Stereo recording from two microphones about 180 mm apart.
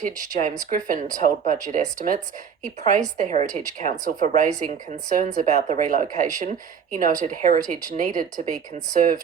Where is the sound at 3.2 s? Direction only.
45° right (ahead or behind).